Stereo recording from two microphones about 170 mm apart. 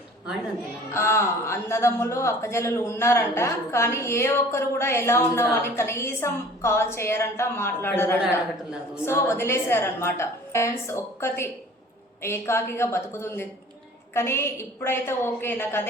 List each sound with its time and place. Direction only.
0.9 s speech: 15° left (ahead or behind)